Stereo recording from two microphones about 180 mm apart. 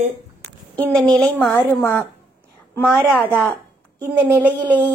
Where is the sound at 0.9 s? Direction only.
5° left (ahead or behind).